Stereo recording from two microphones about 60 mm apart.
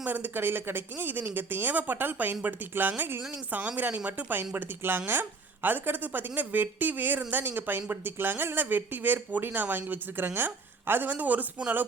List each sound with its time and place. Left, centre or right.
0.0 s a woman's voice: right